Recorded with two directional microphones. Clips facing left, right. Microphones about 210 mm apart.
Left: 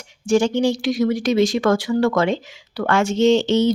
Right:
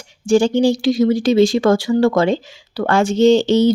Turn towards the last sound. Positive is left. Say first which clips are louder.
# right 4 dB
turn(degrees=-35)  # may be behind; listen again after turning